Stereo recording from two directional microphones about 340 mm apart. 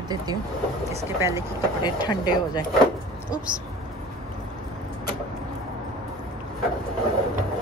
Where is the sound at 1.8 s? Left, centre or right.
Centre.